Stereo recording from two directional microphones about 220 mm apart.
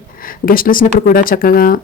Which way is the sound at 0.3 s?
40° left (ahead or behind).